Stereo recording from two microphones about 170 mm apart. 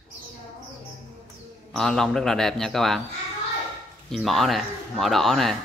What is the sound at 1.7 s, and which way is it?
Speech, centre (ahead or behind).